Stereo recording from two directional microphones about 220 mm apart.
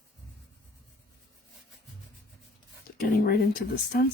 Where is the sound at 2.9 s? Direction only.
40° left (ahead or behind).